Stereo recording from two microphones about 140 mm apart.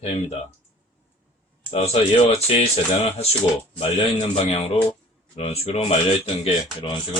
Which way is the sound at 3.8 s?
45° left (ahead or behind).